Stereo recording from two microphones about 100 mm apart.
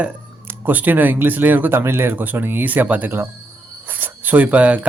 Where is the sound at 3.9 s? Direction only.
20° right (ahead or behind).